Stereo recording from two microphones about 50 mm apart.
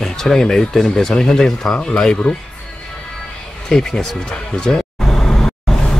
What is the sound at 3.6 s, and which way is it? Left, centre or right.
Music, centre.